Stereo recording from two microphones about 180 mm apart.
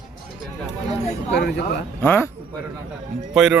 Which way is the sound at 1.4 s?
65° left (ahead or behind).